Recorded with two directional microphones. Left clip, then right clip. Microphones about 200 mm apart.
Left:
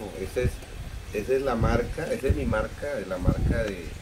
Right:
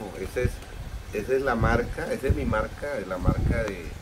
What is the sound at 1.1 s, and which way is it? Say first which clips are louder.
Speech: right 1 dB; 15° right (ahead or behind).